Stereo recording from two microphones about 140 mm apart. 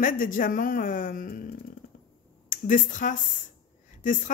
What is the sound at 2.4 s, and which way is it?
Speech, 70° left (ahead or behind).